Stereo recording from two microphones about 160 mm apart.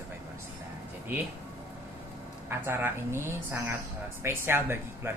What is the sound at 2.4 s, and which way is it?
Speech, 15° right (ahead or behind).